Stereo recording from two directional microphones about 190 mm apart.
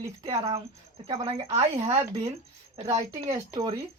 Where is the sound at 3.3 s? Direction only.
20° right (ahead or behind).